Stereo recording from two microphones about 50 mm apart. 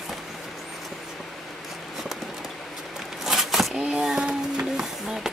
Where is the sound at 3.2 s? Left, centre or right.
Centre.